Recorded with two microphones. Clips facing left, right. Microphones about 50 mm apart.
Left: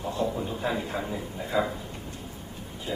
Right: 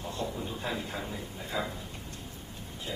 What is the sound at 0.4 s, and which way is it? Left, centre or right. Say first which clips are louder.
A man's voice: left 5 dB; centre.